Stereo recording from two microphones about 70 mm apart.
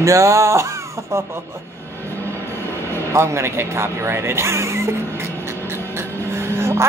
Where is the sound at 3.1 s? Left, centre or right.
Right.